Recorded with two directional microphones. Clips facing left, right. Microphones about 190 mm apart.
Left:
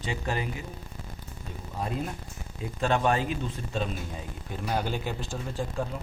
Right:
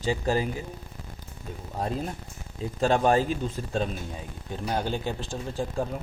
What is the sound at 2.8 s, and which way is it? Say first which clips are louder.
Speech: right 4 dB; 35° right (ahead or behind).